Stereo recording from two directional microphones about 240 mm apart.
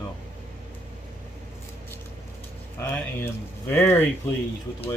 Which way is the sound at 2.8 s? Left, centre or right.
Centre.